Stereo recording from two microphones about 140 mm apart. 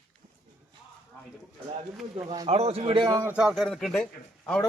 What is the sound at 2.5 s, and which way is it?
Speech, 45° right (ahead or behind).